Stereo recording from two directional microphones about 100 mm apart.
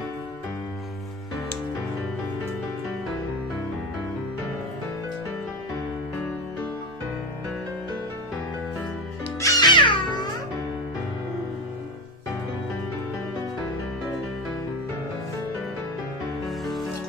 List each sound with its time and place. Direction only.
9.4 s music: 35° left (ahead or behind)
9.7 s cat: 50° left (ahead or behind)
16.4 s music: centre (ahead or behind)